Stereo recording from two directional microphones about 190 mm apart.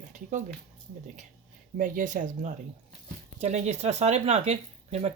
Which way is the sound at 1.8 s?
45° right (ahead or behind).